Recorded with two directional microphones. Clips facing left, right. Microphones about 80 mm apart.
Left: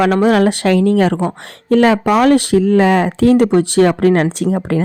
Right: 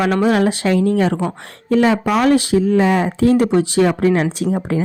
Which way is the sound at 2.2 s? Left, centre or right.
Left.